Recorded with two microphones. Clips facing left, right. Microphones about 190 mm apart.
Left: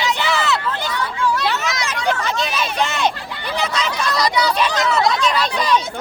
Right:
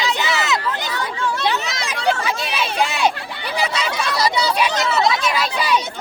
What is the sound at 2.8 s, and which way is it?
Hubbub, 10° right (ahead or behind).